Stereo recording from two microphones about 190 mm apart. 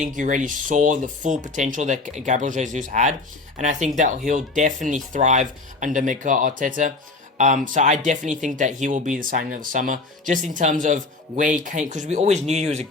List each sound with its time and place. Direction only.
0.0 s speech: 45° right (ahead or behind)